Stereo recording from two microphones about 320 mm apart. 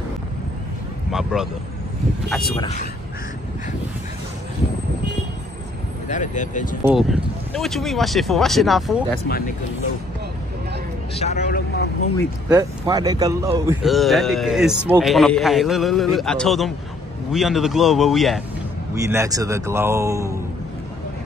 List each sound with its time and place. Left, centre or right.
1.1 s a man's voice: centre
2.6 s speech: left
6.0 s speech: left
6.9 s speech: centre
11.1 s vehicle: left
12.4 s a man's voice: centre